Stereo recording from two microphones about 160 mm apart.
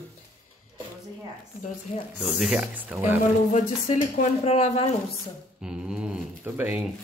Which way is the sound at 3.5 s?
50° left (ahead or behind).